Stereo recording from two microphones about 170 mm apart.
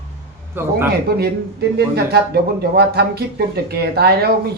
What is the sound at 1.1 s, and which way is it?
Speech, 70° right (ahead or behind).